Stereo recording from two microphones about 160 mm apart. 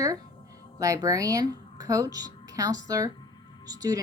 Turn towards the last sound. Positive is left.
turn(degrees=-25)  # may be behind; listen again after turning